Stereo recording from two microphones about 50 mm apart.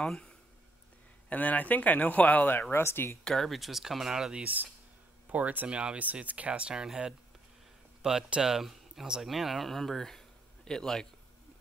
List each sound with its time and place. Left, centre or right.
0.0 s speech: centre
1.3 s speech: left
2.7 s speech: left
3.4 s speech: centre
4.4 s speech: right
5.7 s speech: right; by 11.1 s centre